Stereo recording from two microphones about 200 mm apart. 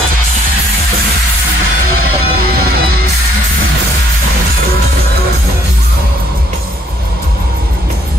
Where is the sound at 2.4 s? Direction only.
50° right (ahead or behind).